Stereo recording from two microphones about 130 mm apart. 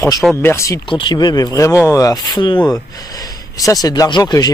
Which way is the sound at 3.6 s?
30° left (ahead or behind).